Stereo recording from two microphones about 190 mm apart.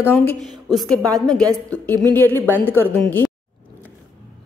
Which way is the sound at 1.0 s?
20° right (ahead or behind).